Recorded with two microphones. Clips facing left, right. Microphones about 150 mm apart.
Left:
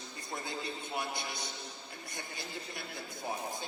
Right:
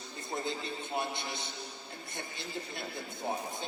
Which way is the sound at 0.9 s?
25° right (ahead or behind).